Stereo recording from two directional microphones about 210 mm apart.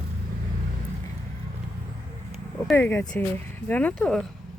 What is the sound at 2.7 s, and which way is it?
Speech, 10° left (ahead or behind).